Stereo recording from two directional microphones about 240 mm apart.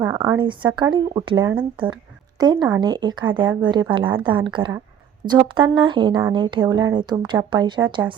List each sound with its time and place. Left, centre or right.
0.0 s speech: centre